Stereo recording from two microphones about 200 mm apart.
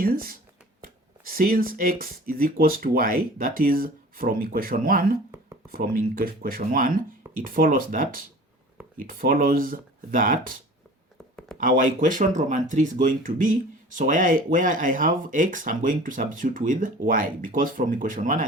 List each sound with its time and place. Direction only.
0.0 s speech: 45° right (ahead or behind)
11.6 s speech: 40° right (ahead or behind)